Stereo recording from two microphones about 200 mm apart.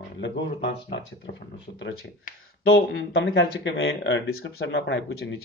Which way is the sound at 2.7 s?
60° left (ahead or behind).